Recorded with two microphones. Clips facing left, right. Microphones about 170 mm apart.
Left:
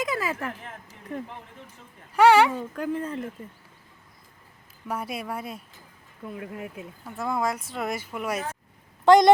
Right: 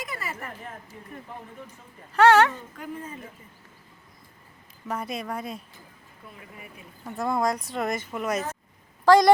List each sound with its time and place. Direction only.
0.0 s a sound: 90° left
1.1 s speech: 85° left
2.1 s a woman's voice: 10° left (ahead or behind)
2.7 s speech: 85° left
4.9 s a woman's voice: 10° left (ahead or behind)
6.3 s speech: 70° left (ahead or behind)
7.0 s speech: centre (ahead or behind)
9.0 s speech: 20° left (ahead or behind)